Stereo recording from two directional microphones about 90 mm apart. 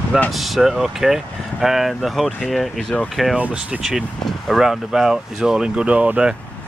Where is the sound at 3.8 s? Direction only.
Centre (ahead or behind).